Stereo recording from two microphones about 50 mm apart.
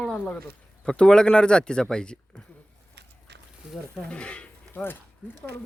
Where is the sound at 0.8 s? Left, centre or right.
Centre.